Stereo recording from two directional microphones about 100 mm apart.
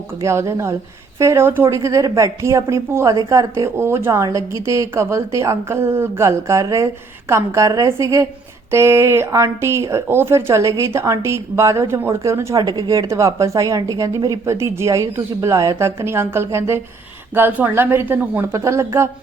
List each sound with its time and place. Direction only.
0.2 s speech: 30° right (ahead or behind)